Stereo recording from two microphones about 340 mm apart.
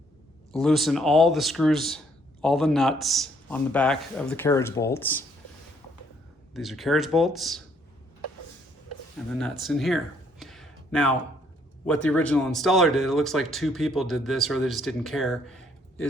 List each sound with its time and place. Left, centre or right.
0.6 s speech: centre
6.5 s speech: centre
9.3 s speech: centre
10.4 s a sound: centre
11.9 s speech: centre